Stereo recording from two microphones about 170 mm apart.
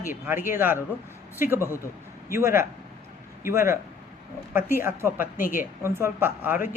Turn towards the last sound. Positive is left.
turn(degrees=-10)  # may be behind; listen again after turning